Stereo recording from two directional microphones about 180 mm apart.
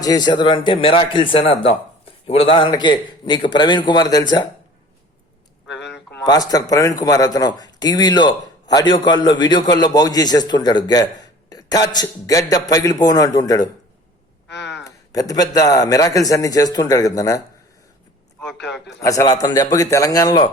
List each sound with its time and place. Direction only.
0.0 s speech: 20° left (ahead or behind)
6.2 s speech: 20° left (ahead or behind)
14.5 s a sound: 75° left (ahead or behind)
14.8 s speech: 20° left (ahead or behind)
18.9 s speech: 20° left (ahead or behind)